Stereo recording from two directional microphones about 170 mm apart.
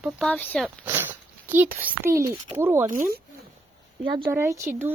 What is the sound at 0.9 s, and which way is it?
A child's voice, 10° right (ahead or behind).